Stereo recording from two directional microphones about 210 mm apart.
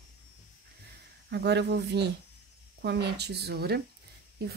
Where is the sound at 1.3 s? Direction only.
55° right (ahead or behind).